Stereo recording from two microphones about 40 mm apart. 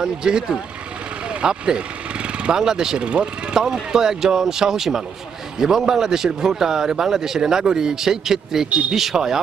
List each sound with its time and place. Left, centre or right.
0.0 s speech: centre
1.3 s a sound: right
2.6 s a man's voice: centre